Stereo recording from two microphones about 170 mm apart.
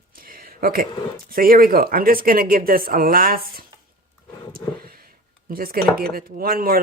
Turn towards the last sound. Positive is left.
turn(degrees=-60)  # may be behind; listen again after turning